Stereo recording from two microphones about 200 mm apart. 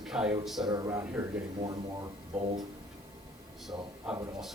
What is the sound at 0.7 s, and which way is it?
Speech, 15° right (ahead or behind).